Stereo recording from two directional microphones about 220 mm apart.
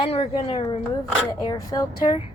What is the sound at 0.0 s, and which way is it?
Speech, 25° left (ahead or behind).